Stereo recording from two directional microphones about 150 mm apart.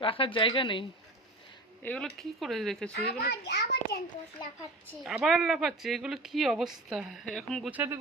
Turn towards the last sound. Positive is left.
turn(degrees=-15)  # may be behind; listen again after turning